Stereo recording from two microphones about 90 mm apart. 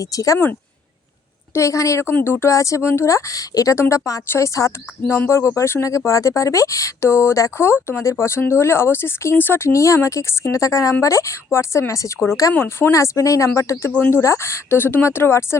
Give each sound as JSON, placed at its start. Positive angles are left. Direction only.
{"t": 0.0, "sound": "speech", "side_deg": 40}
{"t": 1.5, "sound": "speech", "side_deg": 35}